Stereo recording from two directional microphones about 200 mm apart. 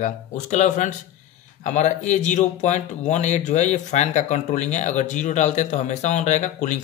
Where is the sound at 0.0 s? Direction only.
35° left (ahead or behind).